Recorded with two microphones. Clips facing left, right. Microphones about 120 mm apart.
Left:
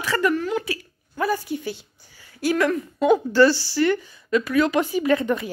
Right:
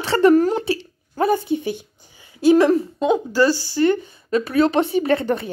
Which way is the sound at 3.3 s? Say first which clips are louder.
Left 1 dB; 15° right (ahead or behind).